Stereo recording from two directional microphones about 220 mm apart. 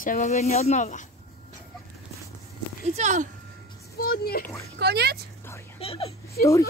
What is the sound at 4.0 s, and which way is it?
Speech, 45° left (ahead or behind).